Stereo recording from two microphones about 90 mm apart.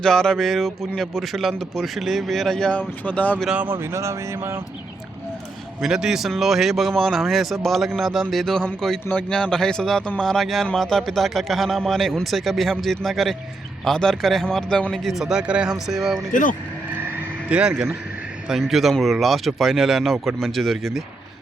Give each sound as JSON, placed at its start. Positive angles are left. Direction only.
{"t": 0.0, "sound": "speech", "side_deg": 5}
{"t": 3.5, "sound": "speech", "side_deg": -20}
{"t": 3.8, "sound": "a sound", "side_deg": -30}
{"t": 5.8, "sound": "speech", "side_deg": -5}
{"t": 17.2, "sound": "vehicle", "side_deg": -15}
{"t": 18.4, "sound": "speech", "side_deg": -5}